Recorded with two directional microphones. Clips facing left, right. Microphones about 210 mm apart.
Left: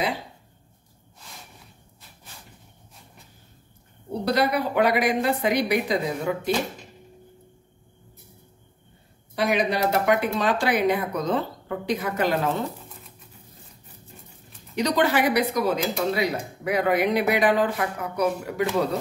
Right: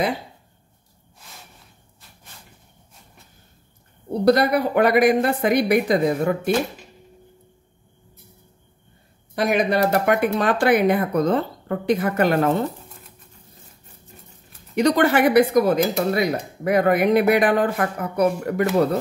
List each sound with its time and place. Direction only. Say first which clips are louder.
4.2 s speech: right 6 dB; 50° right (ahead or behind)
9.3 s speech: right 3 dB; 50° right (ahead or behind)
14.8 s speech: right 5 dB; 55° right (ahead or behind)